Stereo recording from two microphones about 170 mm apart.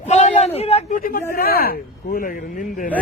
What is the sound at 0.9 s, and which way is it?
Speech, 55° left (ahead or behind).